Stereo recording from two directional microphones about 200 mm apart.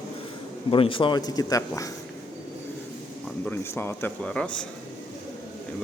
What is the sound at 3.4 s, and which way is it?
Speech, 10° left (ahead or behind).